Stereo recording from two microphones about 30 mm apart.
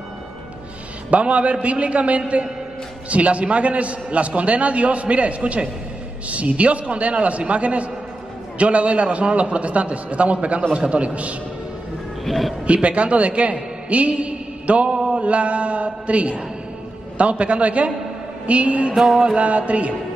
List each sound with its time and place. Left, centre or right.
1.1 s a man's voice: right
12.3 s speech: centre
12.6 s a man's voice: right
14.9 s mantra: right
15.1 s a man's voice: right